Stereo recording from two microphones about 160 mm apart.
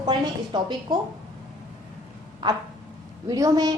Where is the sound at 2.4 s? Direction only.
25° right (ahead or behind).